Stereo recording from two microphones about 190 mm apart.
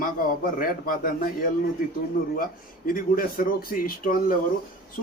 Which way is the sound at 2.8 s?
50° left (ahead or behind).